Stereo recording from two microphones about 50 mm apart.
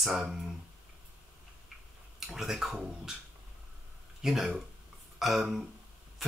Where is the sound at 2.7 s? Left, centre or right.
Centre.